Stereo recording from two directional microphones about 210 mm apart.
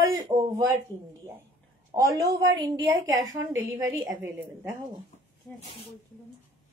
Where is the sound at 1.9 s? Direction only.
15° right (ahead or behind).